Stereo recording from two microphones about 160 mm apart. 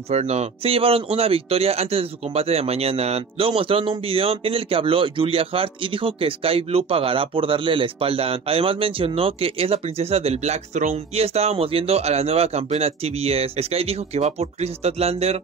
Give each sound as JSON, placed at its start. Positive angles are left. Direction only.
{"t": 0.1, "sound": "speech", "side_deg": -40}